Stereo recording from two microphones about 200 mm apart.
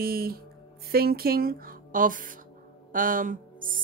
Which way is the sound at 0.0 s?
50° right (ahead or behind).